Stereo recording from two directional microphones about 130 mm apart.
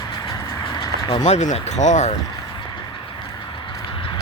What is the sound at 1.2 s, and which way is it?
Speech, 70° left (ahead or behind).